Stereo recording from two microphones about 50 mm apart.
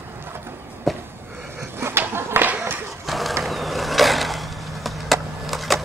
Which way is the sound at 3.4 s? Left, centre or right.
Centre.